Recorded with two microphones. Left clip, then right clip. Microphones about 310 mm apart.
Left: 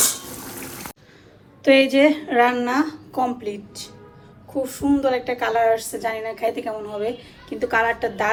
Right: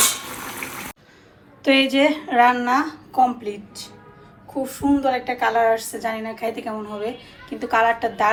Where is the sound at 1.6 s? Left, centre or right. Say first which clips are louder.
Left 2 dB; centre.